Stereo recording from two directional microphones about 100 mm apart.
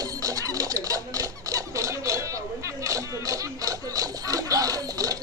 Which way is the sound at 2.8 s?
35° right (ahead or behind).